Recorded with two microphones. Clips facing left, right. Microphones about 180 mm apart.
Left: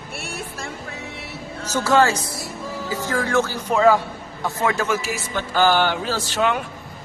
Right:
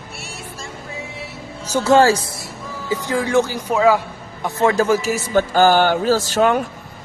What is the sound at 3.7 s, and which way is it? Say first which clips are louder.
Speech: right 1 dB; 5° right (ahead or behind).